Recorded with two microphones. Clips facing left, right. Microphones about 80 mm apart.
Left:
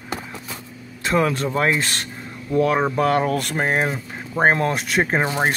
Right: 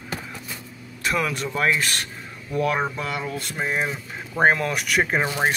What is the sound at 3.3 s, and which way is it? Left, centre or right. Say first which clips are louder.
Speech: left 6 dB; left.